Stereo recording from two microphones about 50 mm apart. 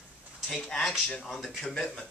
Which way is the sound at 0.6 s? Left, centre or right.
Centre.